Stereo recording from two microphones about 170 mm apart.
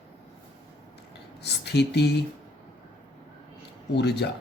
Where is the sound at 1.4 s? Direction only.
80° left.